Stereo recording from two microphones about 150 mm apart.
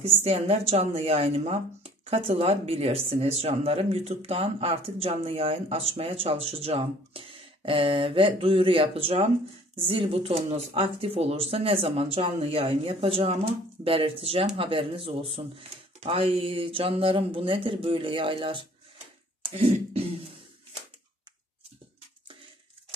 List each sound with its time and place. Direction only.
0.0 s speech: 45° right (ahead or behind)
19.4 s beatboxing: 40° right (ahead or behind)